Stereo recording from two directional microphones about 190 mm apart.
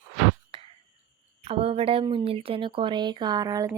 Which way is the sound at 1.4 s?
30° right (ahead or behind).